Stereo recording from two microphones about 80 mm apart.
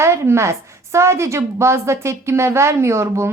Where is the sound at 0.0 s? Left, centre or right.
Right.